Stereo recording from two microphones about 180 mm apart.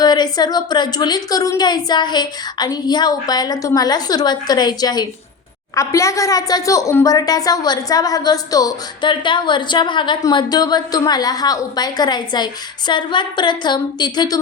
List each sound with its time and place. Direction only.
0.0 s a woman's voice: 25° left (ahead or behind)